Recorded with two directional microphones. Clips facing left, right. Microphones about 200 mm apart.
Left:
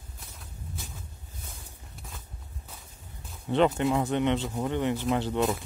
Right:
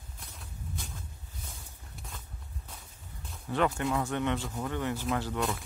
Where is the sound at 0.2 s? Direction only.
Centre (ahead or behind).